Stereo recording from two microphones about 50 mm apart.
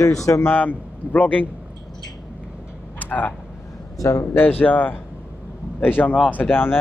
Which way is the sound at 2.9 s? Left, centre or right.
Left.